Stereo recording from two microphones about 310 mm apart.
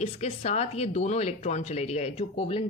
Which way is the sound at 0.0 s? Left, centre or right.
Left.